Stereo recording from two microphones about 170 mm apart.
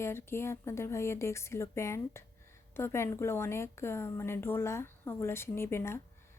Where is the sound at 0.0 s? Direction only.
15° left (ahead or behind).